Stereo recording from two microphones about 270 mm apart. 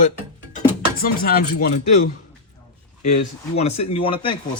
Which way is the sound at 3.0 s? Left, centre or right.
Left.